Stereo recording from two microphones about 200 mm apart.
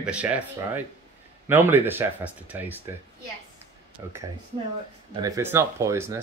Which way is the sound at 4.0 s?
20° right (ahead or behind).